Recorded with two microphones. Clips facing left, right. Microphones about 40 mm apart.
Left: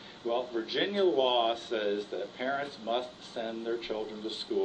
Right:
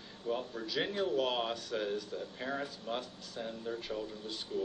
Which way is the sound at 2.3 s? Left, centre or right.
Left.